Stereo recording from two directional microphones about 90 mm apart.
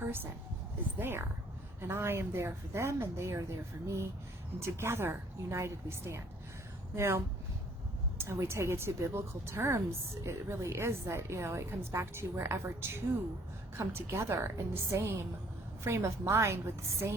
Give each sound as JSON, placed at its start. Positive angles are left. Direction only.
{"t": 0.0, "sound": "a sound", "side_deg": -25}
{"t": 0.9, "sound": "a woman's voice", "side_deg": -25}
{"t": 4.6, "sound": "a woman's voice", "side_deg": -30}
{"t": 8.2, "sound": "a woman's voice", "side_deg": -30}